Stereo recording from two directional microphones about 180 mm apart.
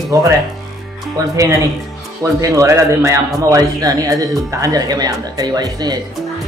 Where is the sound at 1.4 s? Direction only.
20° right (ahead or behind).